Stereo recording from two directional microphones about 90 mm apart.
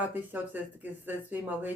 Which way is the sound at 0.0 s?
20° right (ahead or behind).